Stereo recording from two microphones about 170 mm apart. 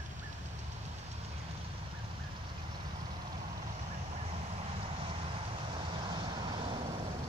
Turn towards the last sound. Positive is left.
turn(degrees=-30)  # may be behind; listen again after turning